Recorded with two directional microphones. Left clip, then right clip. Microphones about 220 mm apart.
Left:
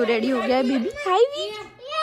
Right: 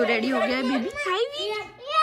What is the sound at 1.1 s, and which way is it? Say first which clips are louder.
Speech: left 8 dB; 20° left (ahead or behind).